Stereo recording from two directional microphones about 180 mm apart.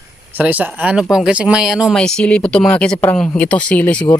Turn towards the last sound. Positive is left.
turn(degrees=5)  # may be behind; listen again after turning